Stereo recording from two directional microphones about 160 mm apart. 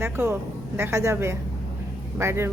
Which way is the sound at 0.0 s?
15° right (ahead or behind).